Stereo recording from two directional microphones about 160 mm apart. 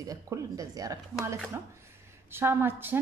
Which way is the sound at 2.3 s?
15° right (ahead or behind).